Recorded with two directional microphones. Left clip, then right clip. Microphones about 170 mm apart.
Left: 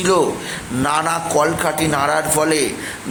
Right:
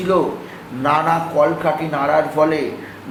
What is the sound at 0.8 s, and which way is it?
A man's voice, 45° left (ahead or behind).